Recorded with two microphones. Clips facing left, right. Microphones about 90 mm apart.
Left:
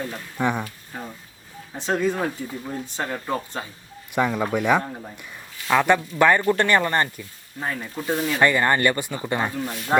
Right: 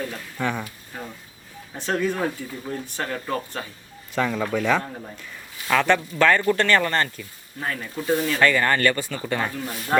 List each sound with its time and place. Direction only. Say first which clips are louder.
0.1 s speech: left 3 dB; 15° left (ahead or behind)
1.7 s speech: left 1 dB; 15° left (ahead or behind)
8.4 s speech: left 3 dB; 20° left (ahead or behind)
9.6 s speech: left 1 dB; centre (ahead or behind)